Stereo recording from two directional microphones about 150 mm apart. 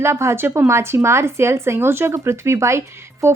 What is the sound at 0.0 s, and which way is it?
A woman's voice, 20° right (ahead or behind).